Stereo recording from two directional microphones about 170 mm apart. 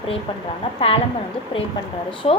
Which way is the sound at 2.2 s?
35° left (ahead or behind).